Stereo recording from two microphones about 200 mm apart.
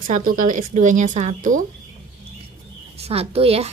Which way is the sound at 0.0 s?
45° right (ahead or behind).